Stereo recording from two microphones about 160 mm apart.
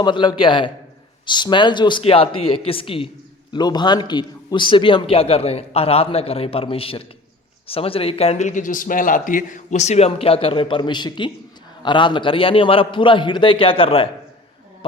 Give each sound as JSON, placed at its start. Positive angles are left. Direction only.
{"t": 0.0, "sound": "a man's voice", "side_deg": 30}